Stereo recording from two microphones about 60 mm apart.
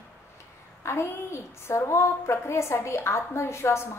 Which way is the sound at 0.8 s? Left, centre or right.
Left.